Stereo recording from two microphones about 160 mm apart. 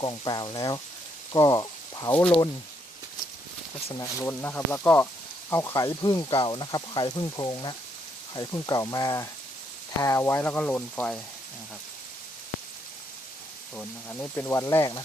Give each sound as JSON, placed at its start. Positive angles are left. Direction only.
{"t": 0.0, "sound": "speech", "side_deg": 25}
{"t": 4.0, "sound": "speech", "side_deg": 15}
{"t": 13.7, "sound": "speech", "side_deg": 10}